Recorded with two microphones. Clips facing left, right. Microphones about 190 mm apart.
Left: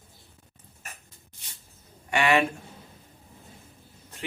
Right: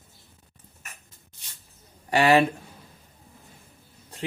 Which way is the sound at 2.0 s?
35° right (ahead or behind).